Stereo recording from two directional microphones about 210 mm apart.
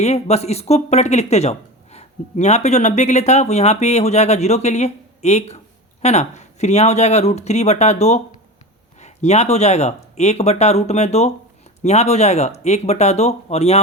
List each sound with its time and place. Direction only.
0.0 s speech: 30° left (ahead or behind)